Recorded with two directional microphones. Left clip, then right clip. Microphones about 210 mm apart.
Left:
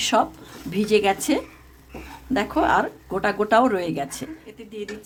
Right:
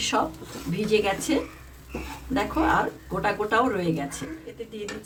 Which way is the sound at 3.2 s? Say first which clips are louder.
Left 5 dB; 50° left (ahead or behind).